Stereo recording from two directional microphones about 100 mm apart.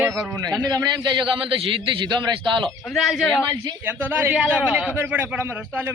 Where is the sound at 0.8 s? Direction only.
50° right (ahead or behind).